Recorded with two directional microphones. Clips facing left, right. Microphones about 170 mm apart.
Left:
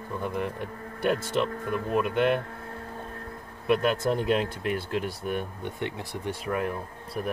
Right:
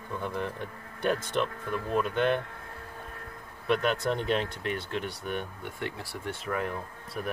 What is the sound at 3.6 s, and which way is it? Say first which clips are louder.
Speech: left 3 dB; 5° left (ahead or behind).